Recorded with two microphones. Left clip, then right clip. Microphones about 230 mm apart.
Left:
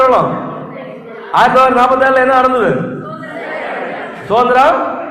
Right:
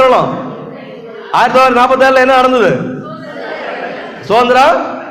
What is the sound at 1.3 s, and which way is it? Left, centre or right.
A man's voice, right.